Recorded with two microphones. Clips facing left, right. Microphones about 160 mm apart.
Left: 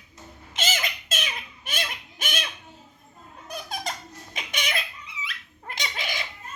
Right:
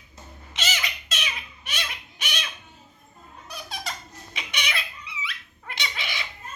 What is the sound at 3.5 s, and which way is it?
Squeak, 50° left (ahead or behind).